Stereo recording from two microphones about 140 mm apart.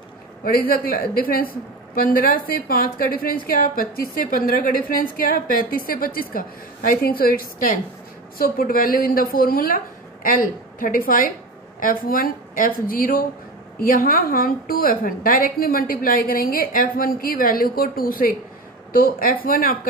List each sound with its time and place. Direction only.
0.4 s speech: 90° left
8.4 s speech: 90° left
10.2 s a woman's voice: 80° left
11.8 s speech: 90° left